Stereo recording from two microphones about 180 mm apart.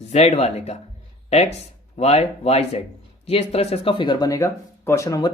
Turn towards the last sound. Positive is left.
turn(degrees=20)  # may be behind; listen again after turning